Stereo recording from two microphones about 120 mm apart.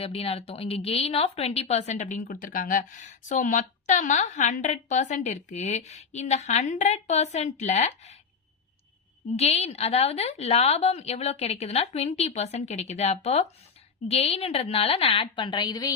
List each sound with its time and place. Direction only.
0.0 s speech: 55° left (ahead or behind)
9.3 s a woman's voice: 60° left (ahead or behind); by 15.9 s 35° left (ahead or behind)